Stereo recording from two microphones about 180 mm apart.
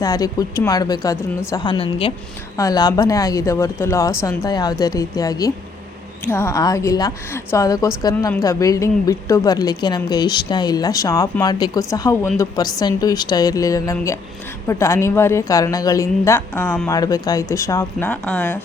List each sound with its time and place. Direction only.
0.0 s a woman's voice: 20° left (ahead or behind)
17.0 s a woman's voice: 20° left (ahead or behind)